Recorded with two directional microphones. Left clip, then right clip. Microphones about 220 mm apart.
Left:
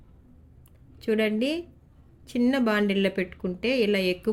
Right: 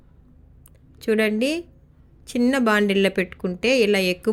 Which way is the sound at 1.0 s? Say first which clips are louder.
Right 4 dB; 15° right (ahead or behind).